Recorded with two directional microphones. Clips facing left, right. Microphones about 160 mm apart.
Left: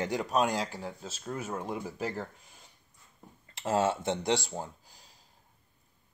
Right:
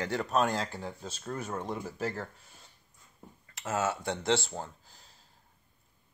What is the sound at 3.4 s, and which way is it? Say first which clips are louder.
Speech: left 4 dB; 30° left (ahead or behind).